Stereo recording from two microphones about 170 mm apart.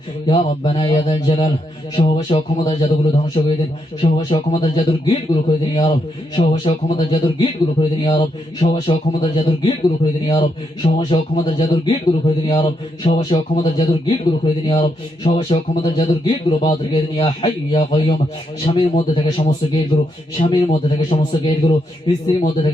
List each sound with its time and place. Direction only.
0.3 s a man's voice: 30° left (ahead or behind)